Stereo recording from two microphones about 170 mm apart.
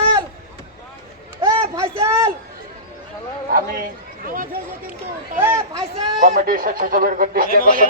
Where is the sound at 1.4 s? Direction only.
15° right (ahead or behind).